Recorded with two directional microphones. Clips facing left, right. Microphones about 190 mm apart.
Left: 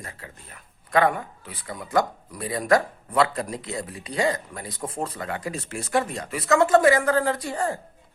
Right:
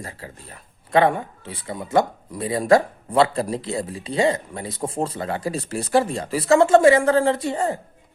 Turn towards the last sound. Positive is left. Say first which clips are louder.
# right 4 dB
turn(degrees=-25)  # may be behind; listen again after turning